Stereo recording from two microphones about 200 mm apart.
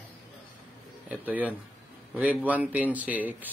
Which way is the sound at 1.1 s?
10° right (ahead or behind).